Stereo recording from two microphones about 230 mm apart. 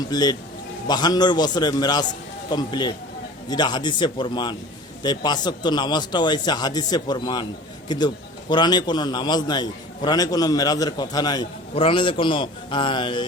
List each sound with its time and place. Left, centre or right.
0.1 s a man's voice: centre